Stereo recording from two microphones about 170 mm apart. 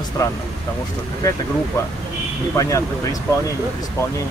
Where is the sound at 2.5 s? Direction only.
20° left (ahead or behind).